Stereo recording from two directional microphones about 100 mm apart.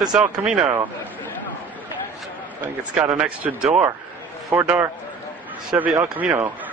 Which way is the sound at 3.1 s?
15° right (ahead or behind).